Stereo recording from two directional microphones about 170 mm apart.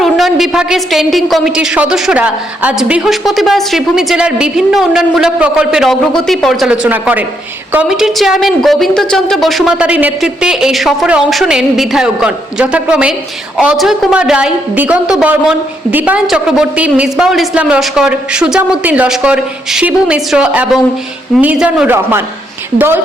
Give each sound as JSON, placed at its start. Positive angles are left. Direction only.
{"t": 0.0, "sound": "a woman's voice", "side_deg": 0}